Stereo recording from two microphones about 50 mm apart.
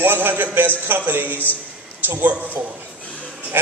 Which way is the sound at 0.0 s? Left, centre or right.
Right.